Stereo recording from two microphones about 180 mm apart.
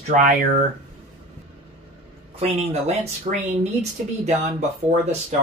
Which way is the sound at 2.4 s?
35° right (ahead or behind).